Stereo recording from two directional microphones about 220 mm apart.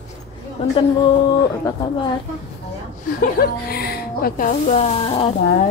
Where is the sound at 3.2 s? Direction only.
45° left (ahead or behind).